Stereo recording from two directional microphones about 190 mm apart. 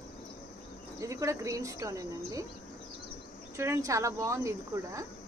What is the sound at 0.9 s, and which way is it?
Speech, 15° right (ahead or behind).